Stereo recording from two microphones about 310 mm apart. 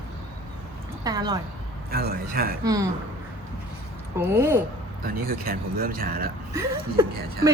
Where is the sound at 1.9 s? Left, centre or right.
Right.